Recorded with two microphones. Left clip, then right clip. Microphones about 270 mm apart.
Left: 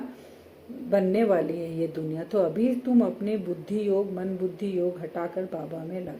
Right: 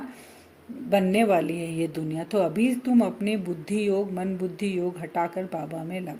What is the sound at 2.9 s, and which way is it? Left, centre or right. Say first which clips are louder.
Speech: right 1 dB; right.